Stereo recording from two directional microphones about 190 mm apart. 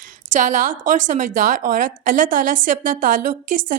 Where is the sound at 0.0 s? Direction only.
40° right (ahead or behind).